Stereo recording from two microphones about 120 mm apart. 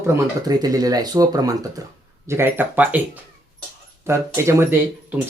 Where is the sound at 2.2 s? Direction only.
20° right (ahead or behind).